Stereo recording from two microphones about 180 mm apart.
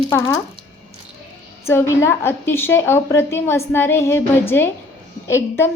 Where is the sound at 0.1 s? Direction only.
20° left (ahead or behind).